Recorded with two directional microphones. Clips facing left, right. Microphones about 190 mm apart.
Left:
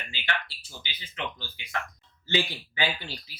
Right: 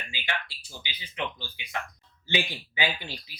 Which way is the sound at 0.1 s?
15° right (ahead or behind).